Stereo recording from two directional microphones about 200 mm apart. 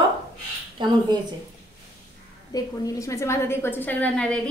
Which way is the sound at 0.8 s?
25° right (ahead or behind).